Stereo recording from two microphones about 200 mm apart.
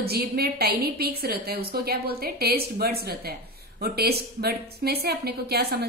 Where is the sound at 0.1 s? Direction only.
50° right (ahead or behind).